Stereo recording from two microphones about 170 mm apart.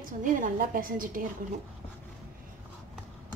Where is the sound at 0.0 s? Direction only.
50° right (ahead or behind).